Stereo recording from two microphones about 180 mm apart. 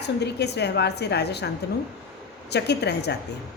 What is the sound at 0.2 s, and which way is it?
A woman's voice, 65° left (ahead or behind).